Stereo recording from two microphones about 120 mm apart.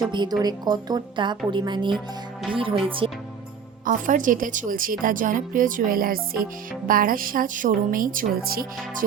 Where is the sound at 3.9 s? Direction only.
90° right.